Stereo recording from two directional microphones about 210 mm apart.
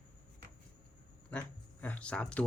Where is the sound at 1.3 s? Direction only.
5° left (ahead or behind).